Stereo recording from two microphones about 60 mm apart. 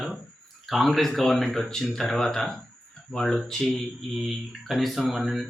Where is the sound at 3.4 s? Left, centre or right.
Centre.